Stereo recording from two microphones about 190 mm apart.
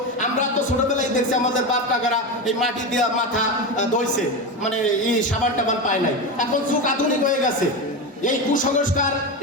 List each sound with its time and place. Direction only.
0.9 s a man's voice: 40° left (ahead or behind)
6.4 s a woman's voice: 45° left (ahead or behind)